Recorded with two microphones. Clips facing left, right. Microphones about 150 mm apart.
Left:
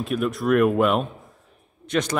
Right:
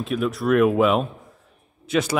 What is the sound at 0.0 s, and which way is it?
A man's voice, centre (ahead or behind).